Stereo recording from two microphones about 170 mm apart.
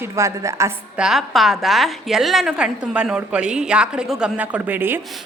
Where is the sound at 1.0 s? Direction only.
Centre (ahead or behind).